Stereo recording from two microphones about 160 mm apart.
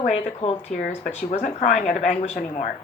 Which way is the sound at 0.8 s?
60° left (ahead or behind).